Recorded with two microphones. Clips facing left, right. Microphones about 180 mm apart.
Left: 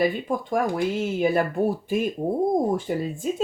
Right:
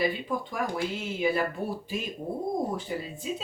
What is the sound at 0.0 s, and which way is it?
Speech, 50° left (ahead or behind).